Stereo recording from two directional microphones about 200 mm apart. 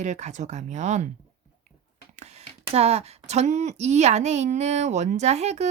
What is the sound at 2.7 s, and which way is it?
Speech, 30° right (ahead or behind).